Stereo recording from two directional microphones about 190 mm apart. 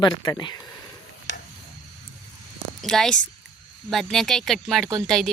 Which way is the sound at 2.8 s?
Centre (ahead or behind).